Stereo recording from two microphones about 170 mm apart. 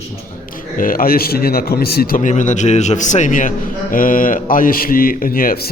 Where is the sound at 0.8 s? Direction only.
55° left (ahead or behind).